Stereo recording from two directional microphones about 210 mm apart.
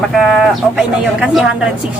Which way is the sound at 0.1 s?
Centre (ahead or behind).